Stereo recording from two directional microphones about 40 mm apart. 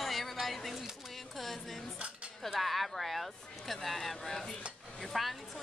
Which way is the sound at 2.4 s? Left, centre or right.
Centre.